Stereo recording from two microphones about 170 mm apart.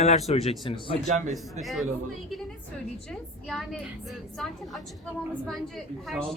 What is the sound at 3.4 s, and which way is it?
Speech, centre (ahead or behind).